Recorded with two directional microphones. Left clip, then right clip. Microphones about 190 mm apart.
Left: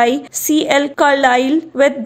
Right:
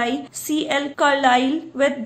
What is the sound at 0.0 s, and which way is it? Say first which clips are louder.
Speech: left 9 dB; 40° left (ahead or behind).